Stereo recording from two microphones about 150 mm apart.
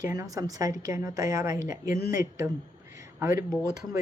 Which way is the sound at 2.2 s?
20° right (ahead or behind).